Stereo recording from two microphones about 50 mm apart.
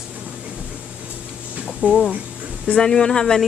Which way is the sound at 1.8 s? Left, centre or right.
Right.